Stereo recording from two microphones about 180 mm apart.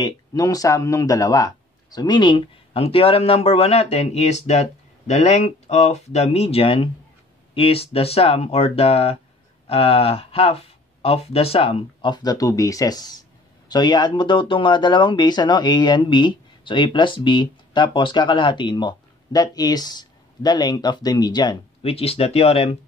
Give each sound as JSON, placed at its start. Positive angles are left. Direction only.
{"t": 0.0, "sound": "speech", "side_deg": 20}